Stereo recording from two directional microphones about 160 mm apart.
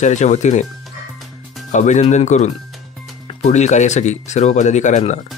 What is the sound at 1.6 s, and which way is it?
Speech, 50° left (ahead or behind).